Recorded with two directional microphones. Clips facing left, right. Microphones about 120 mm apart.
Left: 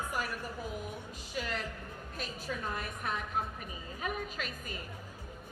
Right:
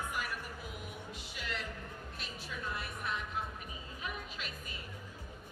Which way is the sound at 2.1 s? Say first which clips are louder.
Left 10 dB; 45° left (ahead or behind).